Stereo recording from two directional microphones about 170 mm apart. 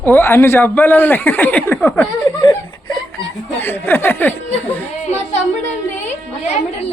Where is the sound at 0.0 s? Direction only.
10° left (ahead or behind).